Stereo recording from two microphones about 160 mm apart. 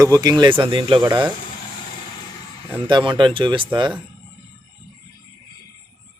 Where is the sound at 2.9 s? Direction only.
30° right (ahead or behind).